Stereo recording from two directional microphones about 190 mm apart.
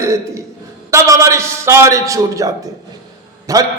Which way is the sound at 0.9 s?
15° right (ahead or behind).